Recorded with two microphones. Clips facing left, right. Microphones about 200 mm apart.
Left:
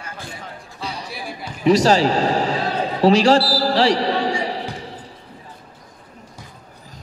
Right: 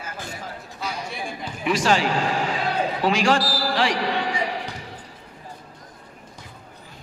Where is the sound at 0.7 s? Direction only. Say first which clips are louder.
Left 1 dB; 30° left (ahead or behind).